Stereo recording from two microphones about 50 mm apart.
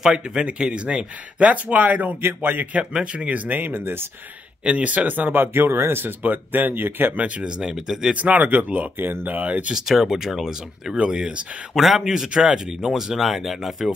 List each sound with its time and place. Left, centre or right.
0.0 s speech: centre; by 2.8 s right
2.8 s speech: centre; by 4.1 s right
4.6 s speech: right
5.3 s speech: right
7.2 s speech: right
7.4 s speech: centre
7.7 s speech: centre
8.1 s speech: right
8.9 s speech: right
10.1 s speech: centre
11.7 s speech: centre